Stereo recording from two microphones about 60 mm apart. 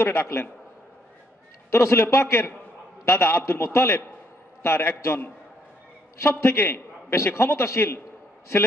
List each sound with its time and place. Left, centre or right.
0.0 s a man's voice: left
1.7 s a man's voice: left
6.5 s a man's voice: left